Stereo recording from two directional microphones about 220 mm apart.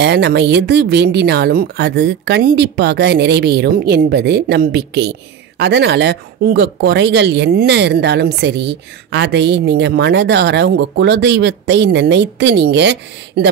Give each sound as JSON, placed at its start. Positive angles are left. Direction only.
{"t": 0.0, "sound": "speech", "side_deg": -50}